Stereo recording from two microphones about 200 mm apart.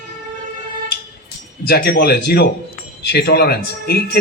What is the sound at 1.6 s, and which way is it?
A man's voice, 50° left (ahead or behind).